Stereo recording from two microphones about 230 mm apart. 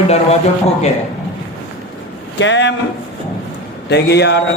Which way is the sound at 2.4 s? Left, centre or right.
Left.